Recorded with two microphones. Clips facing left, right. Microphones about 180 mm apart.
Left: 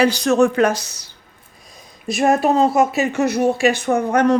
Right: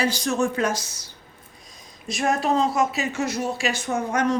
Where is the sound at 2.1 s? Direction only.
60° left (ahead or behind).